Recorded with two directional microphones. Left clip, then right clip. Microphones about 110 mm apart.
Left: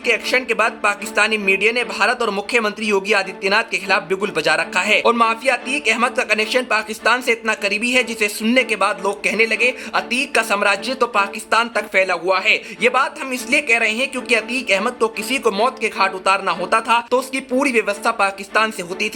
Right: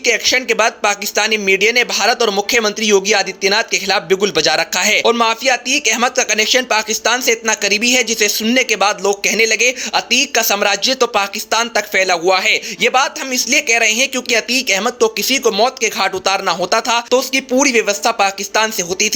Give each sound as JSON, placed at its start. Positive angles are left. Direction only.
{"t": 0.0, "sound": "a man's voice", "side_deg": -20}